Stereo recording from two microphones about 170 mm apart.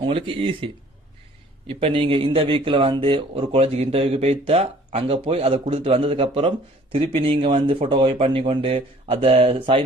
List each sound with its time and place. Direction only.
0.0 s speech: 30° right (ahead or behind)